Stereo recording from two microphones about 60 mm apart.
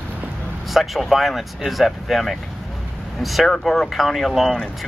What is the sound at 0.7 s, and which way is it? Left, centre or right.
Speech, centre.